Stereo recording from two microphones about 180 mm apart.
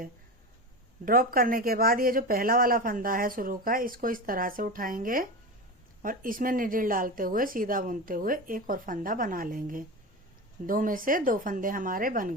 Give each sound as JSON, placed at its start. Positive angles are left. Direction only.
{"t": 1.0, "sound": "speech", "side_deg": -55}